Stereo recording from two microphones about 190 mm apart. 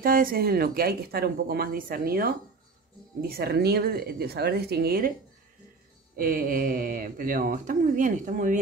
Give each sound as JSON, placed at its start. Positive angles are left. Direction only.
{"t": 0.0, "sound": "speech", "side_deg": -50}
{"t": 6.1, "sound": "speech", "side_deg": -50}